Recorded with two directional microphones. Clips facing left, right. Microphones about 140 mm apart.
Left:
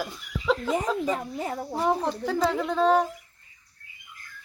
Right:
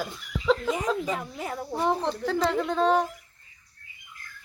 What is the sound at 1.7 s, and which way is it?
Speech, 5° left (ahead or behind).